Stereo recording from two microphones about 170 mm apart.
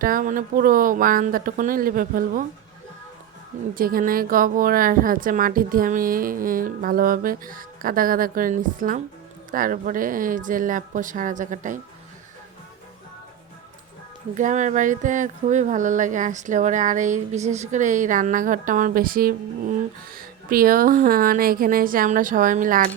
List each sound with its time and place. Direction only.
0.0 s a woman's voice: 55° right (ahead or behind)
3.8 s a woman's voice: 55° right (ahead or behind)
14.3 s a woman's voice: 45° right (ahead or behind)